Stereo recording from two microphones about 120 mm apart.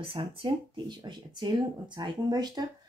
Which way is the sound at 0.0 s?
50° right (ahead or behind).